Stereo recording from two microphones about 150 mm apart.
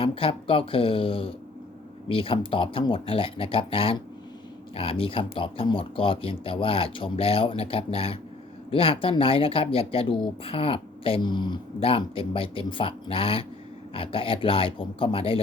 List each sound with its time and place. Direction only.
0.0 s speech: 35° left (ahead or behind)